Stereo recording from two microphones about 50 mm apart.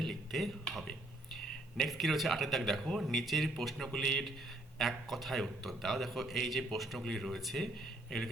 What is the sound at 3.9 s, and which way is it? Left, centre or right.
A man's voice, centre.